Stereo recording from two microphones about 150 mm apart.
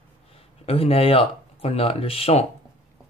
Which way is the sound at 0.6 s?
40° left (ahead or behind).